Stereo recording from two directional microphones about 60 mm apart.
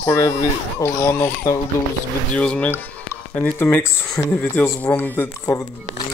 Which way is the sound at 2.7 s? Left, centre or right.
Left.